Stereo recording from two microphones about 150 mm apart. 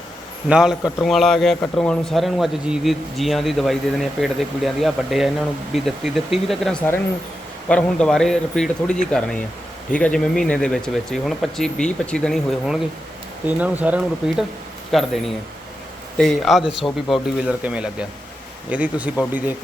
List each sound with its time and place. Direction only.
0.4 s a man's voice: 5° right (ahead or behind)
0.8 s speech: 25° left (ahead or behind)
1.0 s a man's voice: centre (ahead or behind)
14.9 s a man's voice: centre (ahead or behind)
16.1 s a man's voice: centre (ahead or behind)